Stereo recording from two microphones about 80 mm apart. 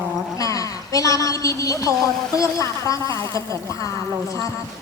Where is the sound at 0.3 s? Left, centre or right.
Left.